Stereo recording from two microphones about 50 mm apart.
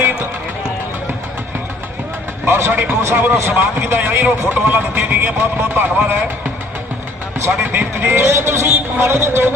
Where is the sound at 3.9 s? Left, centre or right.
Right.